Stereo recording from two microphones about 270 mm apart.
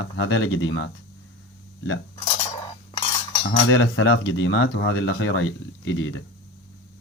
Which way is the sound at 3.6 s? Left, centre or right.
Left.